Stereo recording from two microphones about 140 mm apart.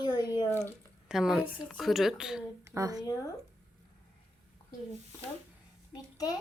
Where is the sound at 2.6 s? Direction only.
25° right (ahead or behind).